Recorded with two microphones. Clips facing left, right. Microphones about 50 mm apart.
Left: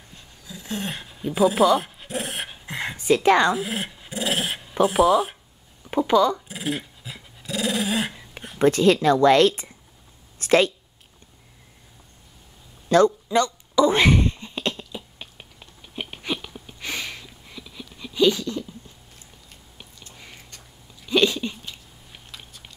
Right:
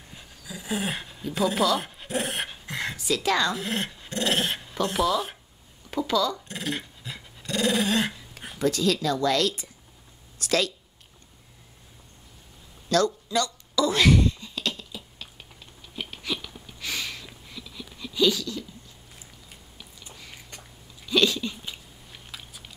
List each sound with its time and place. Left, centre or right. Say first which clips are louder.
0.1 s dog: right 1 dB; centre
1.2 s speech: left 6 dB; centre
1.8 s dog: even; centre
2.6 s a sound: left 1 dB; centre
3.0 s a woman's voice: left 8 dB; left
3.5 s dog: left 2 dB; centre
5.9 s speech: left 6 dB; left
6.5 s dog: left 3 dB; centre
8.5 s speech: left 7 dB; left
10.4 s a sound: left 7 dB; left
12.8 s a sound: left 6 dB; left
21.0 s a sound: left 3 dB; centre